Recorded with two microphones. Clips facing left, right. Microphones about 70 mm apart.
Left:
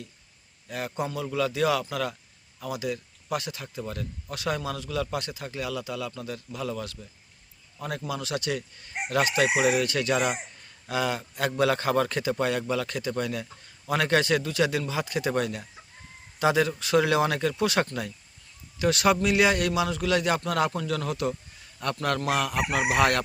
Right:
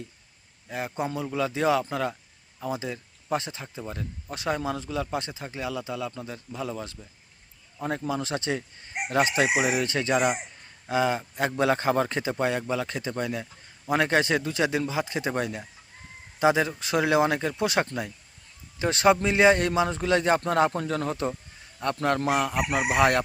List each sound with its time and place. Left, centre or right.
0.7 s a man's voice: right
9.5 s chicken: centre
9.8 s a man's voice: right
22.9 s chicken: centre